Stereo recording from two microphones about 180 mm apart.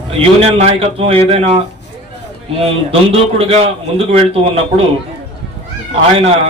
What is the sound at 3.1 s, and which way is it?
A man's voice, 35° right (ahead or behind).